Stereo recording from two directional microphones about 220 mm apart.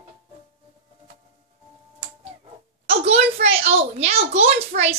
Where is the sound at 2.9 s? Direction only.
30° right (ahead or behind).